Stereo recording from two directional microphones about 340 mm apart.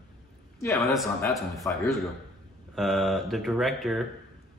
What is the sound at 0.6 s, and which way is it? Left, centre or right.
A woman's voice, centre.